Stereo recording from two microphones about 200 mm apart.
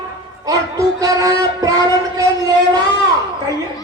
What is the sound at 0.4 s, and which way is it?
Music, 15° right (ahead or behind).